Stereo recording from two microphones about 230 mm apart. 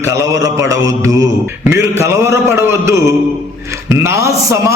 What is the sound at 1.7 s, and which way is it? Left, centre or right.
A man's voice, centre.